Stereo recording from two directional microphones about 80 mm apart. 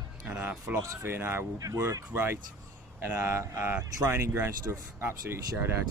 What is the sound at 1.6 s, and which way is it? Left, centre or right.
Speech, right.